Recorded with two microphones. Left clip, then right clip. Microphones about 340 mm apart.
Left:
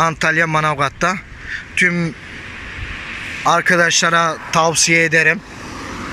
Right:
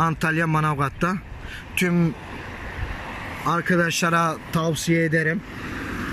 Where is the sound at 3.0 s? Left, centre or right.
Right.